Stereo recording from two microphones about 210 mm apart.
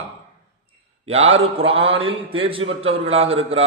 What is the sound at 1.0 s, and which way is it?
A man's voice, 30° right (ahead or behind).